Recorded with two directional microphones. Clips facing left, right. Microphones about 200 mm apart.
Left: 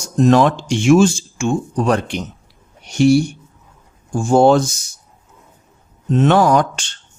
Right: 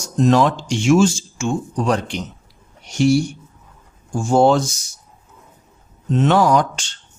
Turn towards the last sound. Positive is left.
turn(degrees=55)  # may be behind; listen again after turning